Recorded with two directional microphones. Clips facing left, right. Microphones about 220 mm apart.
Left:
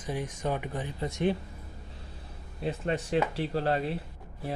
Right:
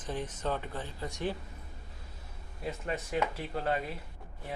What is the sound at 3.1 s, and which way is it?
Speech, 30° left (ahead or behind).